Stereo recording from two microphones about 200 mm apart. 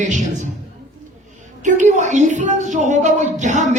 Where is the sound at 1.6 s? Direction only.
35° right (ahead or behind).